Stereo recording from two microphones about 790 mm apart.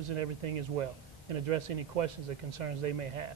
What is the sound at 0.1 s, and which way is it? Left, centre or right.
Speech, right.